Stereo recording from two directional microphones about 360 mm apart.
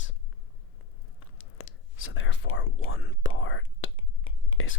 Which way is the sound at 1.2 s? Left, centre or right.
Left.